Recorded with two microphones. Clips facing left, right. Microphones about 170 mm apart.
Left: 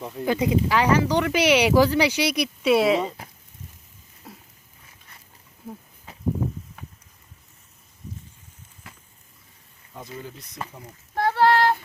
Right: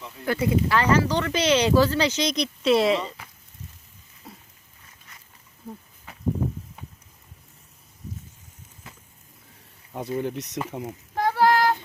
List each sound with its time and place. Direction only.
0.3 s speech: 15° left (ahead or behind)
4.2 s a sound: centre (ahead or behind)
9.9 s speech: 65° right (ahead or behind)
10.7 s a child's voice: 85° right
11.1 s child singing: 10° right (ahead or behind)